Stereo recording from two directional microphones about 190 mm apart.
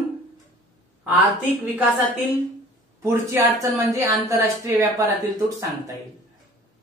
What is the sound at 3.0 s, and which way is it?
Speech, 15° right (ahead or behind).